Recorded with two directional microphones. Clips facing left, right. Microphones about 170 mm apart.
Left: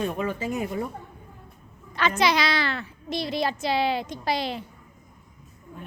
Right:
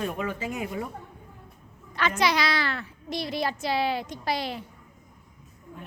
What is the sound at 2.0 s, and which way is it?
A woman's voice, 25° left (ahead or behind).